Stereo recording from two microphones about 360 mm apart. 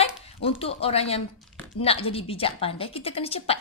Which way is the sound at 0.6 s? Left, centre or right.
Centre.